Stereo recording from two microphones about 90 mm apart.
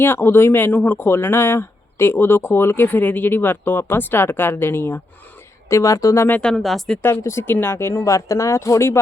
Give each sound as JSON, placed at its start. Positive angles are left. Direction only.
{"t": 0.0, "sound": "speech", "side_deg": 25}
{"t": 6.4, "sound": "speech", "side_deg": 5}
{"t": 7.0, "sound": "speech", "side_deg": 30}